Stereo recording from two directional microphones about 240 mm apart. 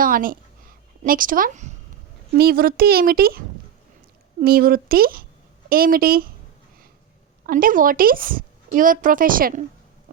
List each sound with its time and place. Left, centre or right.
0.0 s a sound: right
2.4 s a woman's voice: right
7.4 s a woman's voice: right